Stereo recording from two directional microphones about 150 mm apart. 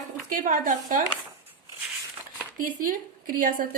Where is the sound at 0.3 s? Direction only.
65° right (ahead or behind).